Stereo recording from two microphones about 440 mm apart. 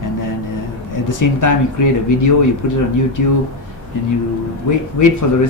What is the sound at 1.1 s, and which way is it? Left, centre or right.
Speech, left.